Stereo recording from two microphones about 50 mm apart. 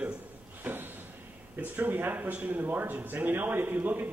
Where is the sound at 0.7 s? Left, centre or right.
Right.